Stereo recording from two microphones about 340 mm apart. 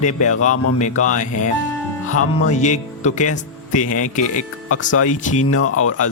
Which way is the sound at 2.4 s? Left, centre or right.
Left.